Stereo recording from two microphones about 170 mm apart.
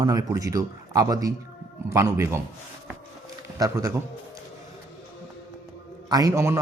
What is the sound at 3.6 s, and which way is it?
Speech, 20° right (ahead or behind).